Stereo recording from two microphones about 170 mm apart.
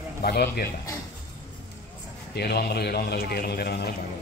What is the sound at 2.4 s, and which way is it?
A man's voice, 70° left (ahead or behind).